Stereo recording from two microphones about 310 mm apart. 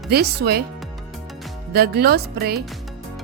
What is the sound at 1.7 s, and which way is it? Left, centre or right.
Speech, right.